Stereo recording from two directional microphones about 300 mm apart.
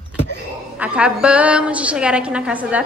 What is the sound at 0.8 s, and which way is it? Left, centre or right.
Speech, centre.